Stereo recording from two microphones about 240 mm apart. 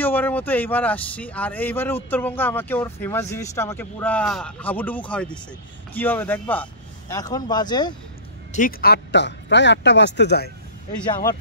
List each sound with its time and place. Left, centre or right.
0.0 s speech: centre
8.5 s speech: left